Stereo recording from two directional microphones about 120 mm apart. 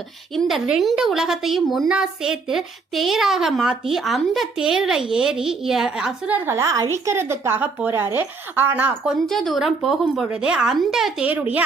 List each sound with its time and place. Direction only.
0.3 s a woman's voice: centre (ahead or behind)
9.2 s a woman's voice: centre (ahead or behind)
11.3 s speech: 15° right (ahead or behind)